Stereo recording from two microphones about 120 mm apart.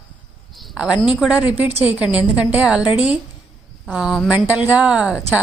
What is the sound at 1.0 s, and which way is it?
A woman's voice, 10° right (ahead or behind).